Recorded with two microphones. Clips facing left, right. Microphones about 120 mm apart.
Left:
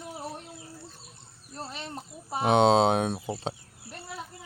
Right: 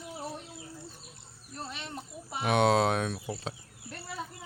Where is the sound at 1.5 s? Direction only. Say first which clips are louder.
Left 2 dB; 35° left (ahead or behind).